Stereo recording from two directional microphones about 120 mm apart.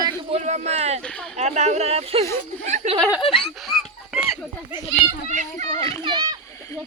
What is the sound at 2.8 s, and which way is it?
Speech, 80° right.